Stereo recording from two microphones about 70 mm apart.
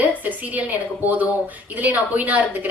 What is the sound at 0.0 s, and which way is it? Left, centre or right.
A woman's voice, right.